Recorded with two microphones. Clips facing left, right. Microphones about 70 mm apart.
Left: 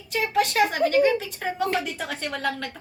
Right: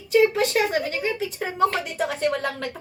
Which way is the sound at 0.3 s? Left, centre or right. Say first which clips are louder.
Left 1 dB; centre.